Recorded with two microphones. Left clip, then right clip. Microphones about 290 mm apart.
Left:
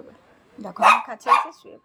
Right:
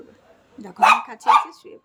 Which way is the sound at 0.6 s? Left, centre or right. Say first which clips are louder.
Left 4 dB; centre.